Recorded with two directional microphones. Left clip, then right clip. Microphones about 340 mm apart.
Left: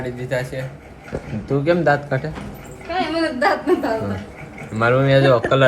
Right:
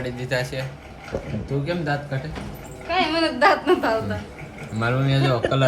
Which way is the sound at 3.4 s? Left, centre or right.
Centre.